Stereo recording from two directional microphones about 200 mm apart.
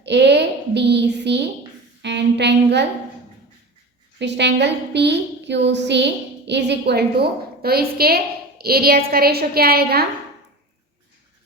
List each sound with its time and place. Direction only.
0.0 s a woman's voice: 60° right (ahead or behind)
4.2 s a woman's voice: 60° right (ahead or behind)